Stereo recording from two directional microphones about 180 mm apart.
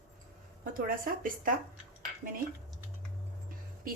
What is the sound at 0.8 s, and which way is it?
Speech, 50° right (ahead or behind).